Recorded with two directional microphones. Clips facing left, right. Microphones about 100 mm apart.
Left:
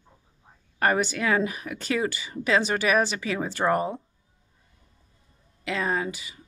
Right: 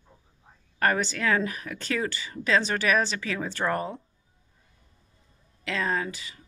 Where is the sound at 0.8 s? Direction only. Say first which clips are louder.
Left 2 dB; 15° left (ahead or behind).